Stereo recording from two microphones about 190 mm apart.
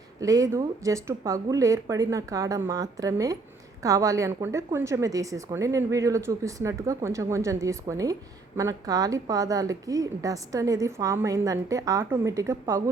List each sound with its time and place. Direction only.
0.2 s a woman's voice: 20° right (ahead or behind)